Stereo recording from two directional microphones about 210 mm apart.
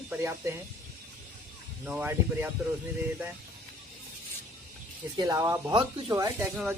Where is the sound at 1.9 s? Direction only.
5° right (ahead or behind).